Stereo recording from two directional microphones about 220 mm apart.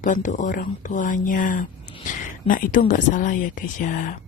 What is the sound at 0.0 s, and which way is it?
Speech, 35° left (ahead or behind).